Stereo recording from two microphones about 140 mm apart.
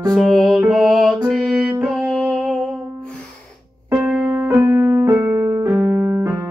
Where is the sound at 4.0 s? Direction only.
10° right (ahead or behind).